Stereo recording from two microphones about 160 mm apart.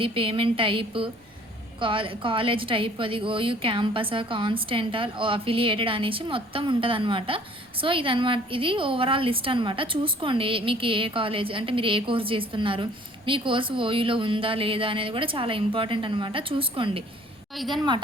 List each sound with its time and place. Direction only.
0.0 s a woman's voice: 35° right (ahead or behind)
17.6 s a woman's voice: centre (ahead or behind)